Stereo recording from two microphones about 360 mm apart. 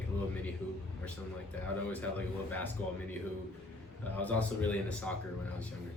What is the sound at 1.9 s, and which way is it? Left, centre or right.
Speech, centre.